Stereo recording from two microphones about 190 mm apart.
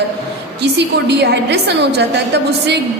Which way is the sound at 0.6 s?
65° right (ahead or behind).